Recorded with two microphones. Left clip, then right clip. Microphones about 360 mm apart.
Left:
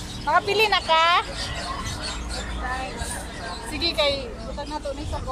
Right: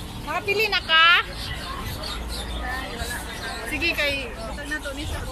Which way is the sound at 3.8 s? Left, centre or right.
Centre.